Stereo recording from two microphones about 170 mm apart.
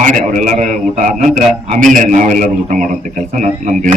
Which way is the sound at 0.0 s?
50° right (ahead or behind).